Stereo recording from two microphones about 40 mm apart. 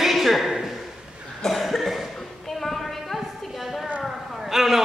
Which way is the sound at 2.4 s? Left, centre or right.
Centre.